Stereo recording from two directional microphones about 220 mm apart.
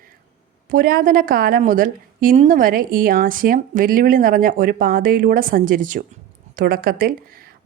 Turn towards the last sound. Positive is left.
turn(degrees=-40)  # may be behind; listen again after turning